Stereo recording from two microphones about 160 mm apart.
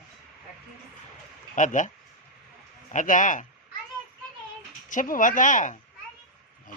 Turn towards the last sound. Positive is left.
turn(degrees=50)  # may be behind; listen again after turning